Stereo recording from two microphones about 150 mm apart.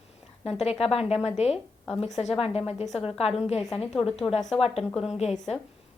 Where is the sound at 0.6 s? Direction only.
40° left (ahead or behind).